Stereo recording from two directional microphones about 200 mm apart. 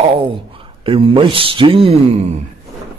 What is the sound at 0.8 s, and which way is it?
Speech, 25° right (ahead or behind).